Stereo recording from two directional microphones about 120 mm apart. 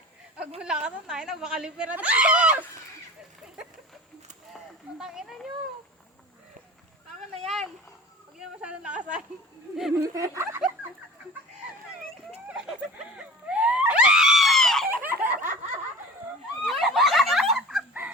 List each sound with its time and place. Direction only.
0.6 s speech: 10° right (ahead or behind)
4.5 s speech: 5° right (ahead or behind)
7.4 s speech: centre (ahead or behind)
10.0 s speech: 25° right (ahead or behind)
12.5 s screaming: 5° right (ahead or behind)
14.8 s snicker: 15° right (ahead or behind)
16.6 s a sound: centre (ahead or behind)